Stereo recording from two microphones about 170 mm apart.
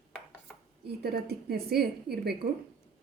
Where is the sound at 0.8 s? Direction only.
70° right (ahead or behind).